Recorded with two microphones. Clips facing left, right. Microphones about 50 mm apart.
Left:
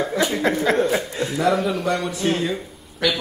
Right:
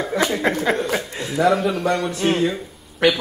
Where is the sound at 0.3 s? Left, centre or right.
Centre.